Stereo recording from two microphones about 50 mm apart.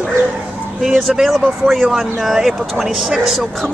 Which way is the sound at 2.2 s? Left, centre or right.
Centre.